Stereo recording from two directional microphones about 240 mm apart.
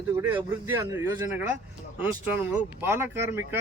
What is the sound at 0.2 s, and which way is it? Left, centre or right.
Speech, centre.